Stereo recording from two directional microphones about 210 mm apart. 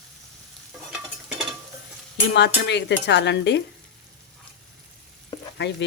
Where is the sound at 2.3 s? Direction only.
55° left (ahead or behind).